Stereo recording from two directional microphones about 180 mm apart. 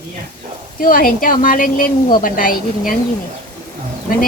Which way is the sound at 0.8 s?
50° left (ahead or behind).